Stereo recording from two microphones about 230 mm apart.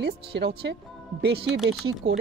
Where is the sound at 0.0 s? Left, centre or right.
Right.